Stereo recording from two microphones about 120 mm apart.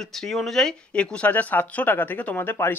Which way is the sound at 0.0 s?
Centre (ahead or behind).